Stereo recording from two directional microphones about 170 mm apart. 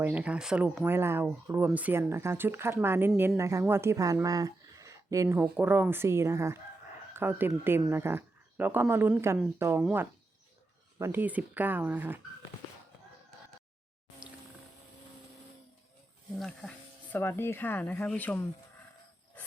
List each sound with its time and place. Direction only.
0.0 s speech: 10° right (ahead or behind)
16.4 s speech: 5° left (ahead or behind)